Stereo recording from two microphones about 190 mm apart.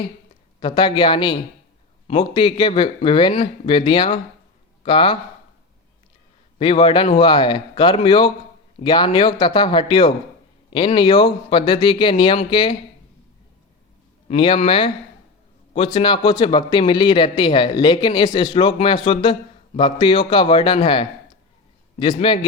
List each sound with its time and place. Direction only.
0.6 s speech: 25° left (ahead or behind)
6.6 s speech: 25° left (ahead or behind)
14.3 s speech: 30° left (ahead or behind)